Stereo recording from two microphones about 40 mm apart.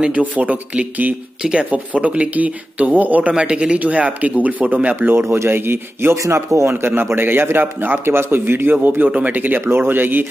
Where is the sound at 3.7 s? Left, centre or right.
Right.